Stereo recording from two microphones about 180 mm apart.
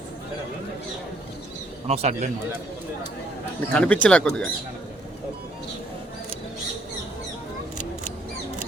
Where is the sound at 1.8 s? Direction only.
35° right (ahead or behind).